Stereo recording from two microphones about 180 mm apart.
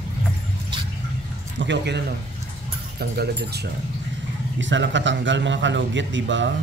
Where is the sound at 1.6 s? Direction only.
80° right.